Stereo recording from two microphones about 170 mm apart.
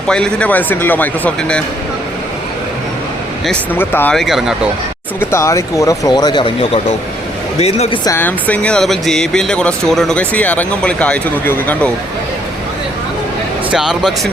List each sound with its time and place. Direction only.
0.1 s speech: 5° left (ahead or behind)
3.4 s speech: 10° left (ahead or behind)
5.2 s speech: 15° left (ahead or behind); by 7.9 s 35° left (ahead or behind)
8.0 s speech: 15° left (ahead or behind)
13.7 s speech: centre (ahead or behind)